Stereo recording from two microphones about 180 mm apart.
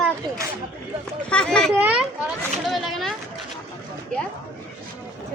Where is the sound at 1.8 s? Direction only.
5° right (ahead or behind).